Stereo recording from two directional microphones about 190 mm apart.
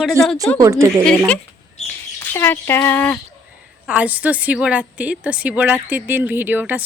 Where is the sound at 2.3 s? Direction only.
10° left (ahead or behind).